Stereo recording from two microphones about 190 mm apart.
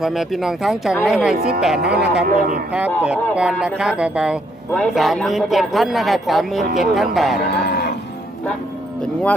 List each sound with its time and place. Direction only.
0.0 s a man's voice: centre (ahead or behind)
1.4 s a man's voice: 55° right (ahead or behind)
1.6 s a man's voice: 5° right (ahead or behind)
2.2 s a man's voice: 45° right (ahead or behind)
3.0 s a man's voice: 5° right (ahead or behind)
7.4 s livestock: 60° left (ahead or behind)